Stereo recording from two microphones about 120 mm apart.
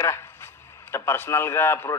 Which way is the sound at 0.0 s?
25° left (ahead or behind).